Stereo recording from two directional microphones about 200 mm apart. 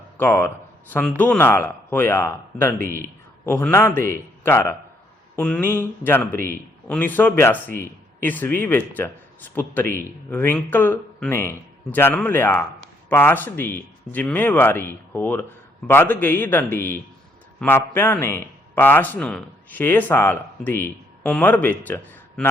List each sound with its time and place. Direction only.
0.2 s a man's voice: 10° left (ahead or behind)